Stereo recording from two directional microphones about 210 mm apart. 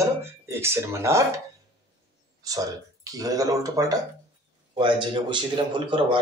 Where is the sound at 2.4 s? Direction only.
15° right (ahead or behind).